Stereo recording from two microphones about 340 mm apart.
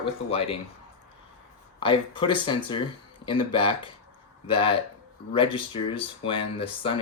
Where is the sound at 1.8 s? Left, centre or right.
Centre.